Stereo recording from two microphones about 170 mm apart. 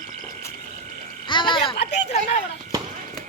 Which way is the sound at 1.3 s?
30° left (ahead or behind).